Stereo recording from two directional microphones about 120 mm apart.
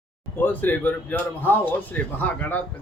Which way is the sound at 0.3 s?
15° left (ahead or behind).